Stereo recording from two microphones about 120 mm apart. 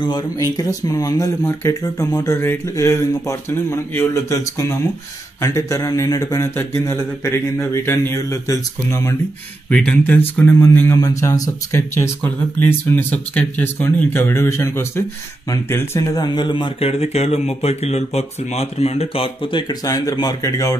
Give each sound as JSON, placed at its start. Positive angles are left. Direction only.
{"t": 0.4, "sound": "speech", "side_deg": 30}
{"t": 9.7, "sound": "speech", "side_deg": 10}
{"t": 16.0, "sound": "a man's voice", "side_deg": 30}
{"t": 16.9, "sound": "speech", "side_deg": 60}